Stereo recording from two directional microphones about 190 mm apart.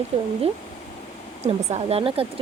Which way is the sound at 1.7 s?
30° right (ahead or behind).